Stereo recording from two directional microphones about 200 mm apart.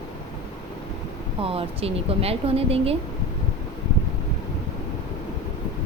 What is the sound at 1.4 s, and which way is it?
Speech, 30° right (ahead or behind).